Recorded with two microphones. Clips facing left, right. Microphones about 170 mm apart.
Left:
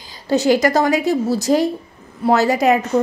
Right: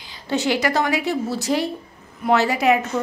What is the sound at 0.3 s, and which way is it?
A woman's voice, 40° left (ahead or behind).